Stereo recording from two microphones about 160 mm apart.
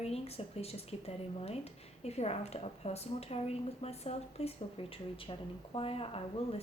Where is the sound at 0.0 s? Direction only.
40° left (ahead or behind).